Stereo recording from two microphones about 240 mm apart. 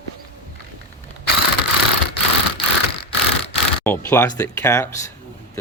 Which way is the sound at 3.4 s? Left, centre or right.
Centre.